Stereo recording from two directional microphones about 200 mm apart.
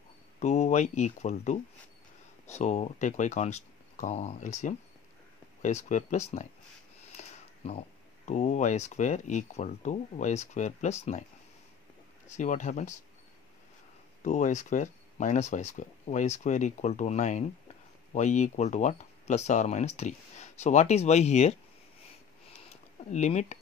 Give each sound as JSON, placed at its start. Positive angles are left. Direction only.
{"t": 0.4, "sound": "speech", "side_deg": 35}
{"t": 7.1, "sound": "a sound", "side_deg": 35}
{"t": 8.3, "sound": "speech", "side_deg": 35}
{"t": 12.3, "sound": "speech", "side_deg": 35}
{"t": 14.2, "sound": "speech", "side_deg": 35}
{"t": 23.1, "sound": "speech", "side_deg": 35}